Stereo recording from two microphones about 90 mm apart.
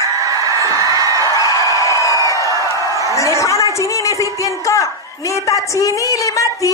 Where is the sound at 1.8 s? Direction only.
35° left (ahead or behind).